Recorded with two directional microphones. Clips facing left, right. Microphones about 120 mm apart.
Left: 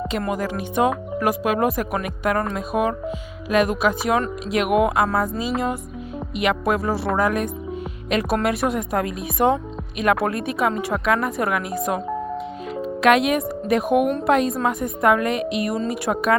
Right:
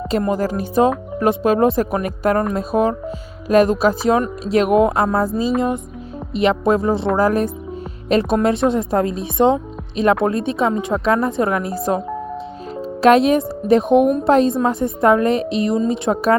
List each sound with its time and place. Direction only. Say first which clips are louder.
0.2 s speech: right 7 dB; 35° right (ahead or behind)
7.2 s speech: right 4 dB; 35° right (ahead or behind)